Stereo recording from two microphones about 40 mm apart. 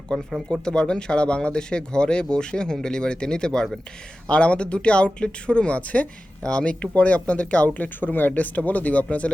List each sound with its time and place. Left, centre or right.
0.3 s speech: centre
0.6 s speech: left
4.3 s speech: left
6.5 s speech: left
6.9 s speech: left
8.0 s speech: left
8.3 s speech: left